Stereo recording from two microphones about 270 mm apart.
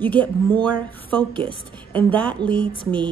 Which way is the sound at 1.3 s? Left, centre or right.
Centre.